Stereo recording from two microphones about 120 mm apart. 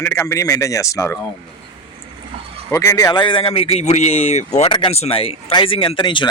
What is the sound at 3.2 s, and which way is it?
Speech, 50° left (ahead or behind).